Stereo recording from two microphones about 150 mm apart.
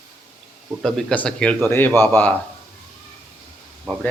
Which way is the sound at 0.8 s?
5° left (ahead or behind).